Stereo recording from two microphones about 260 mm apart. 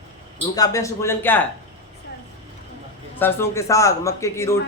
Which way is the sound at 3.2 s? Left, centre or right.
Centre.